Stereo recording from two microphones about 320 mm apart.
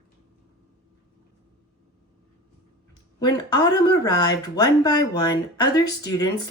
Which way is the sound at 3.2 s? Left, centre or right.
Centre.